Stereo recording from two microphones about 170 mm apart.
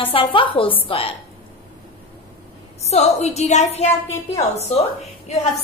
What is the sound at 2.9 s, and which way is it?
Speech, 40° left (ahead or behind).